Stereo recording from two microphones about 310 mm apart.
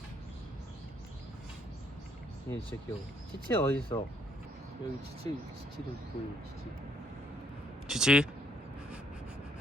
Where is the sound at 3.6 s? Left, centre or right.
Centre.